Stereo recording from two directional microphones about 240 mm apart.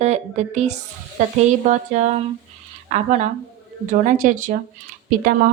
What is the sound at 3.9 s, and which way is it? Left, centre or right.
Speech, right.